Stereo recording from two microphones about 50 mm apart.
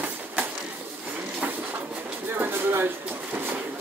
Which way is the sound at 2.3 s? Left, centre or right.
Right.